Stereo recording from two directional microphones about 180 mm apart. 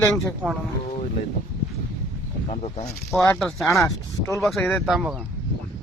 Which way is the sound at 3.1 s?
15° left (ahead or behind).